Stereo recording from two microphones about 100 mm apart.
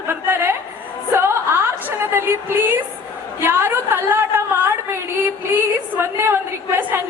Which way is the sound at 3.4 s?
20° right (ahead or behind).